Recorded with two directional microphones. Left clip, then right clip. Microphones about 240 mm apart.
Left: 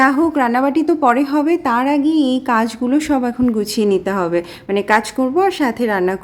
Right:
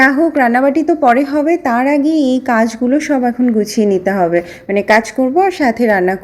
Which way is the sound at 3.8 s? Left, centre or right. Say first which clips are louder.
Right 1 dB; right.